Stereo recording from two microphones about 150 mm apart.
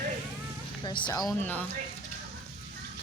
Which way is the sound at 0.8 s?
30° left (ahead or behind).